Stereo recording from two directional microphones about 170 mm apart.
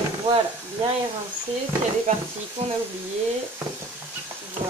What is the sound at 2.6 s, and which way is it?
Speech, 40° right (ahead or behind).